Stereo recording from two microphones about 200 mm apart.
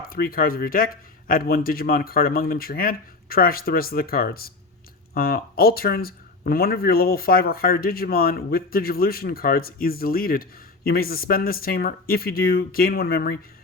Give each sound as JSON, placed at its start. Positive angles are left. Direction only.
{"t": 0.1, "sound": "speech", "side_deg": 45}